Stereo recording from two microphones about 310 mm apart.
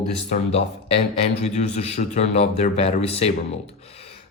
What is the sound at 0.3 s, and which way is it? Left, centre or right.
A man's voice, centre.